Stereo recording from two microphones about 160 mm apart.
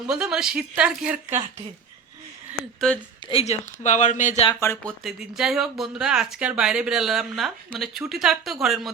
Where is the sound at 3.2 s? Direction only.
40° left (ahead or behind).